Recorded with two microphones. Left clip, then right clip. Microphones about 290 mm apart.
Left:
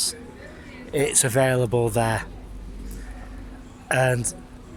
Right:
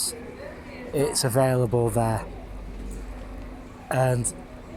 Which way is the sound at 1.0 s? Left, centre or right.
Left.